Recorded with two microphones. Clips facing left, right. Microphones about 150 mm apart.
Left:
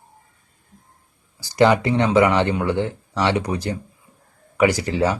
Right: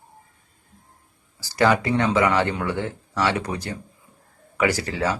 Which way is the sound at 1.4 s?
20° left (ahead or behind).